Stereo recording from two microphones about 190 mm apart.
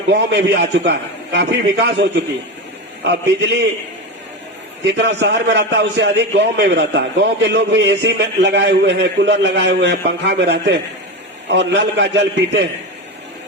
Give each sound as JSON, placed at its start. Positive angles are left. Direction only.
{"t": 0.1, "sound": "a man's voice", "side_deg": -65}
{"t": 4.9, "sound": "a man's voice", "side_deg": -65}